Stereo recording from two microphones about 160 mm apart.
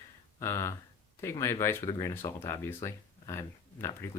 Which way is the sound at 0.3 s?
20° left (ahead or behind).